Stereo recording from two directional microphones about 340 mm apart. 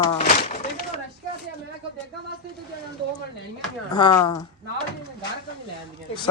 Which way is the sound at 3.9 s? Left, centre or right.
Centre.